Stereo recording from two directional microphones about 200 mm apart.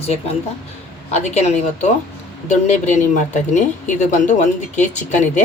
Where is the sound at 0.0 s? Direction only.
30° left (ahead or behind).